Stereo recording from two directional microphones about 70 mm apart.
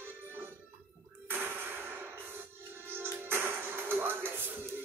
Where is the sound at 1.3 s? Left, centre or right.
Right.